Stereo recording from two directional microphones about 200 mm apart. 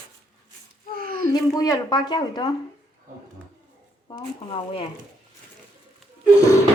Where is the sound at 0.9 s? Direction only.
45° right (ahead or behind).